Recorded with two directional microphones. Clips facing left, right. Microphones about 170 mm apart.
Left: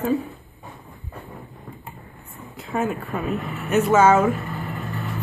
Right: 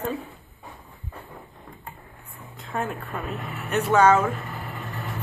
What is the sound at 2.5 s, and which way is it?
Speech, 5° left (ahead or behind).